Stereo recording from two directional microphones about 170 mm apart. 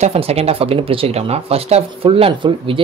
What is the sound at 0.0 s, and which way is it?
Speech, 35° right (ahead or behind).